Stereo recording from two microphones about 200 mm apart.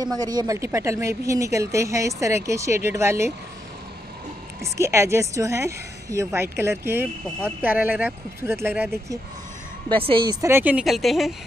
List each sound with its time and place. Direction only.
0.0 s a woman's voice: 20° right (ahead or behind)
4.6 s a woman's voice: 15° right (ahead or behind)
9.8 s a woman's voice: 25° right (ahead or behind)
10.4 s speech: 10° right (ahead or behind)